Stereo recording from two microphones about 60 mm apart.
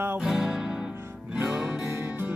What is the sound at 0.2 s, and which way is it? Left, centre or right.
Music, centre.